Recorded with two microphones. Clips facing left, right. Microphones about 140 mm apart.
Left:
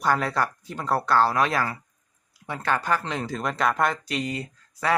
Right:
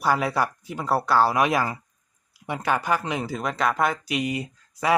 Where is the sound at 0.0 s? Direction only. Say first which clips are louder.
Right 1 dB; 10° right (ahead or behind).